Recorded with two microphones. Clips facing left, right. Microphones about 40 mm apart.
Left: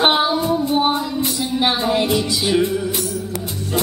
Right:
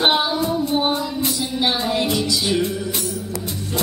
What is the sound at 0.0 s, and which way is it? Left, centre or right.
Child singing, centre.